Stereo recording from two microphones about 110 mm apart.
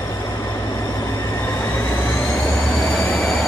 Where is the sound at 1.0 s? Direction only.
25° left (ahead or behind).